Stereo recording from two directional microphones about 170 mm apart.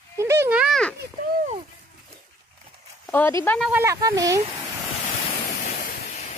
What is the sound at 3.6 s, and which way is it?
Speech, 10° right (ahead or behind).